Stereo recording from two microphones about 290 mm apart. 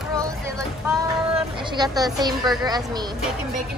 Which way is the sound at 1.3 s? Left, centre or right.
Centre.